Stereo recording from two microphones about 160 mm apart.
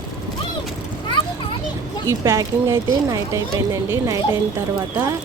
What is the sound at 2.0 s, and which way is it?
Speech, 20° right (ahead or behind).